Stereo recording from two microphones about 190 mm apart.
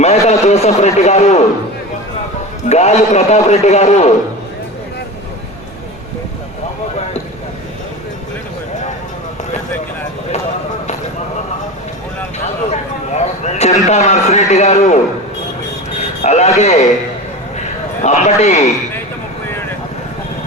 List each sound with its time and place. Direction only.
0.0 s a man's voice: 35° left (ahead or behind)
2.6 s a man's voice: 35° left (ahead or behind)
12.4 s a sound: 35° left (ahead or behind)
16.0 s radio: 35° left (ahead or behind)
16.6 s a man's voice: 35° left (ahead or behind)